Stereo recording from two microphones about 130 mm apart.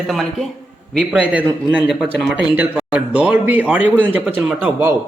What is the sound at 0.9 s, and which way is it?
A man's voice, 10° right (ahead or behind).